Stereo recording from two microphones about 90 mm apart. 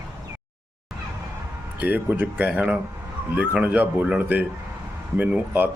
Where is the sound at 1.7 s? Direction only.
20° right (ahead or behind).